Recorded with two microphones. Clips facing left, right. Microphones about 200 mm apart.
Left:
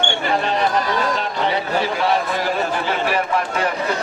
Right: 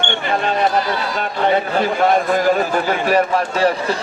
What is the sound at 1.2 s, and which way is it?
Speech, 50° right (ahead or behind).